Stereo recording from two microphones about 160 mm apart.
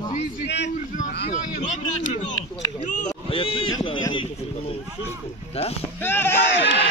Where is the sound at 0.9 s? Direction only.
50° left (ahead or behind).